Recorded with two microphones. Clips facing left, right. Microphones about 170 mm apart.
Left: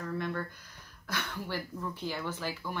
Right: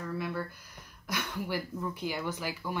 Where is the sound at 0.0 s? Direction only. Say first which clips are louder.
Even; 5° right (ahead or behind).